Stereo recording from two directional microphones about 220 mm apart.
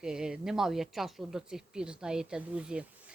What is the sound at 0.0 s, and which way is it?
Speech, 5° right (ahead or behind).